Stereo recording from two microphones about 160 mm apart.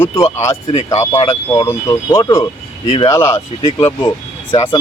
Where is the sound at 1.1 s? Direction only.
30° left (ahead or behind).